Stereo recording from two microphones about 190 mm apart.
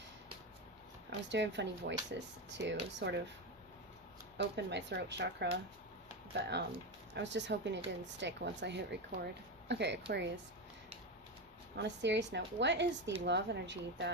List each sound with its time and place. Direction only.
1.3 s speech: 70° right (ahead or behind)
4.5 s speech: 65° right (ahead or behind)
11.8 s speech: 65° right (ahead or behind)